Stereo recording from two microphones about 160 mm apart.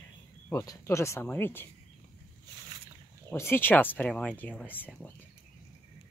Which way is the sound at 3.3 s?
15° left (ahead or behind).